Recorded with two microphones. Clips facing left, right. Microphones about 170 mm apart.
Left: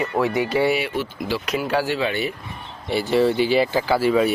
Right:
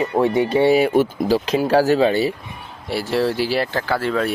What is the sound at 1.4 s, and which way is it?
Speech, 30° right (ahead or behind).